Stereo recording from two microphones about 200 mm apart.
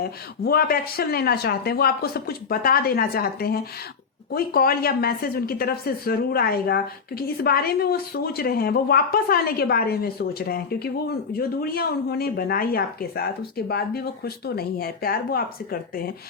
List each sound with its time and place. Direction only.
0.0 s a woman's voice: 50° left (ahead or behind)